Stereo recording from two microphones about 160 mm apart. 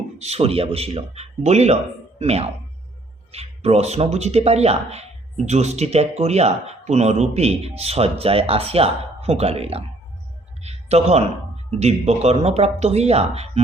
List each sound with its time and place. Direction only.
0.2 s speech: 40° right (ahead or behind)
10.6 s a sound: 40° right (ahead or behind)
11.7 s speech: 40° right (ahead or behind)